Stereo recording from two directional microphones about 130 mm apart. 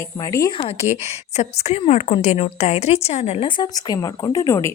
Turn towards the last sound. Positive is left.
turn(degrees=25)  # may be behind; listen again after turning